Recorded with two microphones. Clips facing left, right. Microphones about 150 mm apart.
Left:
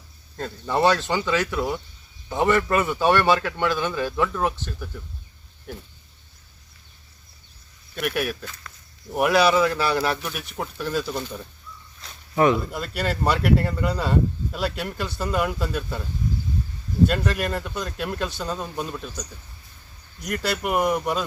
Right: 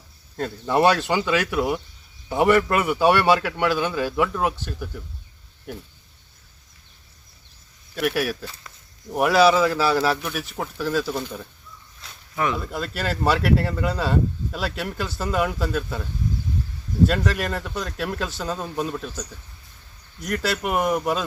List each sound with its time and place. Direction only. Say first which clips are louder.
0.3 s a man's voice: right 3 dB; 10° right (ahead or behind)
7.9 s speech: right 2 dB; 5° right (ahead or behind)
12.3 s speech: left 6 dB; 30° left (ahead or behind)
12.5 s speech: even; centre (ahead or behind)
17.1 s speech: right 1 dB; centre (ahead or behind)